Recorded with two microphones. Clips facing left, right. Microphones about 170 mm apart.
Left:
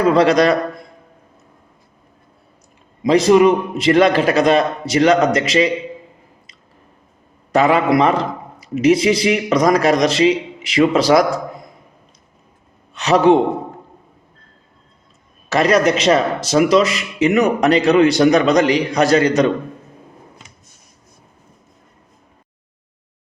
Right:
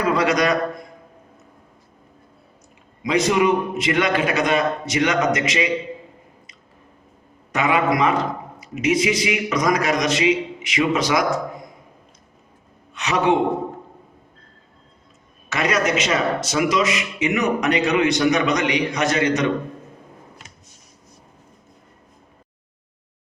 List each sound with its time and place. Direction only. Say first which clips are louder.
0.0 s a man's voice: left 6 dB; 30° left (ahead or behind)
3.0 s a man's voice: left 7 dB; 35° left (ahead or behind)
7.5 s a man's voice: left 6 dB; 35° left (ahead or behind)
12.9 s a man's voice: left 7 dB; 35° left (ahead or behind)
15.4 s a man's voice: left 7 dB; 35° left (ahead or behind)